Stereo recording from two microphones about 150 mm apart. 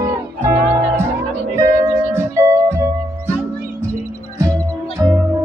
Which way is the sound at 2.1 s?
20° right (ahead or behind).